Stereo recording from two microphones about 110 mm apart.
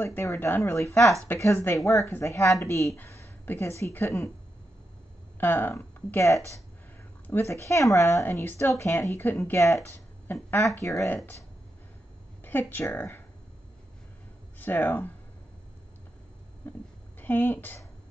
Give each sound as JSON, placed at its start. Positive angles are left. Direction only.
{"t": 0.0, "sound": "speech", "side_deg": 20}
{"t": 5.4, "sound": "speech", "side_deg": 20}
{"t": 12.4, "sound": "speech", "side_deg": 15}
{"t": 14.6, "sound": "speech", "side_deg": 20}
{"t": 16.6, "sound": "a sound", "side_deg": 20}
{"t": 17.2, "sound": "a woman's voice", "side_deg": 20}